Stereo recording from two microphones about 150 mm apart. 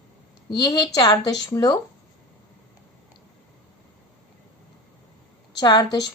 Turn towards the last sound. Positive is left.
turn(degrees=30)  # may be behind; listen again after turning